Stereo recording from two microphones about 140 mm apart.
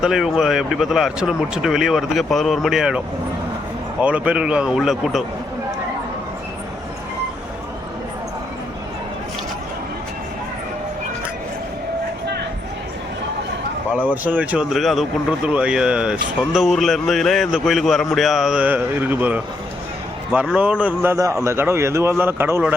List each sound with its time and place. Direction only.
0.0 s speech: 5° right (ahead or behind)
4.0 s a man's voice: 10° right (ahead or behind)
14.0 s a man's voice: 10° right (ahead or behind)